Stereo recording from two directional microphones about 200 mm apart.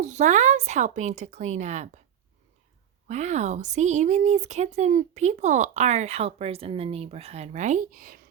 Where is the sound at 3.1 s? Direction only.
35° right (ahead or behind).